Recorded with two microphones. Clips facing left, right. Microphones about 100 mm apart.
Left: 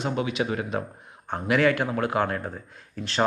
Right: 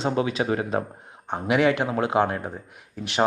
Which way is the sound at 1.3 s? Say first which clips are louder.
Right 1 dB; 20° right (ahead or behind).